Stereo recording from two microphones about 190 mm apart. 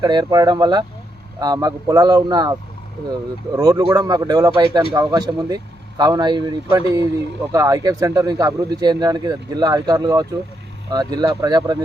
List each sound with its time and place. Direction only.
0.0 s speech: 20° right (ahead or behind)